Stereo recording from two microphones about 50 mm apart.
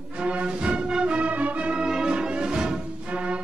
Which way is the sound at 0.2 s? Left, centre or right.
Right.